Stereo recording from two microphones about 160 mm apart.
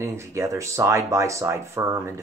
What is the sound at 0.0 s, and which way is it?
Speech, 15° right (ahead or behind).